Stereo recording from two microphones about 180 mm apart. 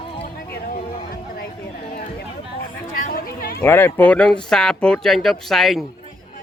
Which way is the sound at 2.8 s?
50° left (ahead or behind).